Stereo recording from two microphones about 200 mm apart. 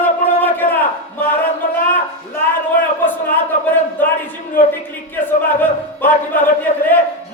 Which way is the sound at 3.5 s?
40° left (ahead or behind).